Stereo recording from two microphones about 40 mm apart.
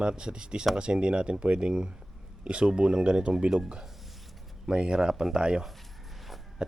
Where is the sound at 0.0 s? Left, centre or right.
Right.